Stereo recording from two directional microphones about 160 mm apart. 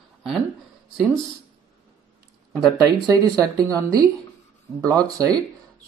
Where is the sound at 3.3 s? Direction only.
25° right (ahead or behind).